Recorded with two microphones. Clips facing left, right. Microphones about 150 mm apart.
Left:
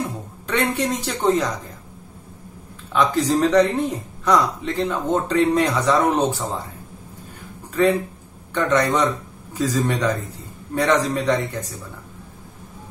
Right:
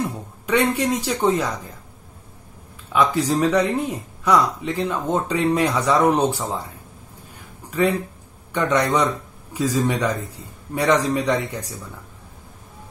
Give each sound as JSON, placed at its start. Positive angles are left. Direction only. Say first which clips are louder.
{"t": 0.5, "sound": "speech", "louder": "right 2 dB", "side_deg": -10}
{"t": 2.9, "sound": "speech", "louder": "even", "side_deg": -10}
{"t": 8.5, "sound": "speech", "louder": "even", "side_deg": -15}